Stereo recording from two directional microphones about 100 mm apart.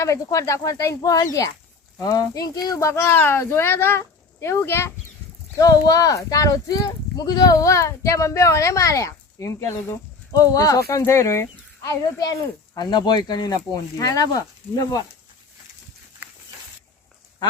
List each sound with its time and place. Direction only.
0.0 s speech: 35° left (ahead or behind)
5.5 s speech: 35° left (ahead or behind)